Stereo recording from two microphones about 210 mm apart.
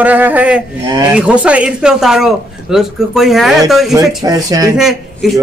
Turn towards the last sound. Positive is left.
turn(degrees=0)  # may be behind; listen again after turning